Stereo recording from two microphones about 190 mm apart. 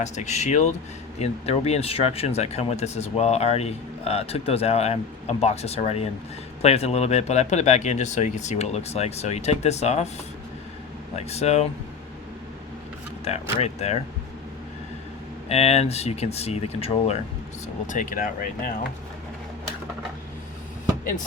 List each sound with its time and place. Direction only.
0.0 s speech: 40° left (ahead or behind)
11.3 s speech: 35° left (ahead or behind)
13.2 s speech: 35° left (ahead or behind)
15.4 s speech: 35° left (ahead or behind)
17.8 s speech: 45° left (ahead or behind)